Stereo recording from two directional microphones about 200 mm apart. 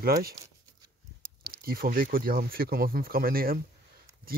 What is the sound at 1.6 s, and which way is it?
Speech, 45° right (ahead or behind).